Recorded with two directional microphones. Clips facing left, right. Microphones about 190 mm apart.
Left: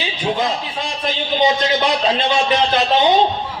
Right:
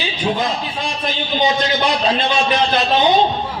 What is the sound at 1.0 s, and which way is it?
Speech, 20° left (ahead or behind).